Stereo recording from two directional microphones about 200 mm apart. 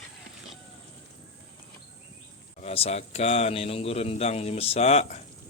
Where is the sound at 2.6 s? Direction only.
30° left (ahead or behind).